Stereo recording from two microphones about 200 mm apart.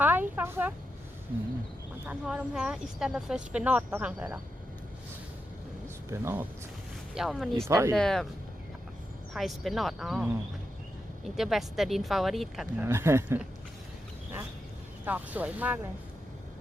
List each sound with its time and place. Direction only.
0.0 s a sound: 10° right (ahead or behind)
2.0 s speech: 5° right (ahead or behind)
6.1 s speech: 10° right (ahead or behind)
7.7 s speech: 15° right (ahead or behind)
7.9 s speech: 5° left (ahead or behind)
9.3 s speech: centre (ahead or behind)
11.3 s speech: centre (ahead or behind)
12.9 s speech: 15° right (ahead or behind)
15.0 s speech: 10° right (ahead or behind)